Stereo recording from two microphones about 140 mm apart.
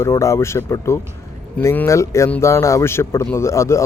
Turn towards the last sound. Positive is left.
turn(degrees=20)  # may be behind; listen again after turning